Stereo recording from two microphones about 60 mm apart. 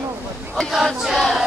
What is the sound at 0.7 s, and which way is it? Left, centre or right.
Battle cry, centre.